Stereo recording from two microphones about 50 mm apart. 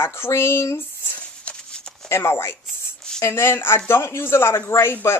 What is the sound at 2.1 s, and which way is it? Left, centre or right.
A woman's voice, left.